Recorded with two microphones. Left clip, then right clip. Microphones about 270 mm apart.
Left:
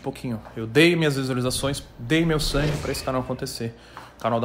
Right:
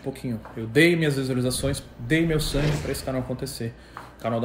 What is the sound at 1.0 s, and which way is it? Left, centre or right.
Speech, centre.